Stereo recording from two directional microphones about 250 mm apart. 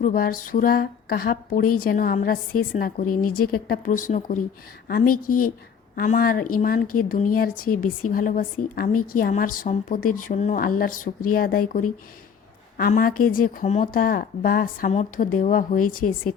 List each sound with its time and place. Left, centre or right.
0.0 s speech: left
6.0 s a woman's voice: left